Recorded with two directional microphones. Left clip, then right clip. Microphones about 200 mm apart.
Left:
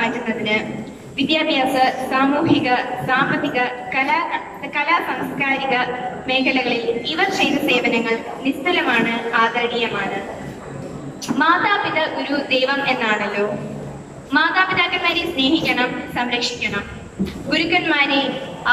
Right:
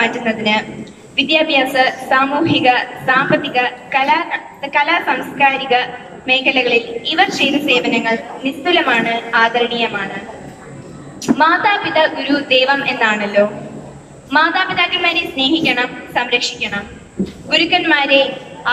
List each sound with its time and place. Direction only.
0.0 s a man's voice: 45° right (ahead or behind)
11.3 s a woman's voice: 45° right (ahead or behind)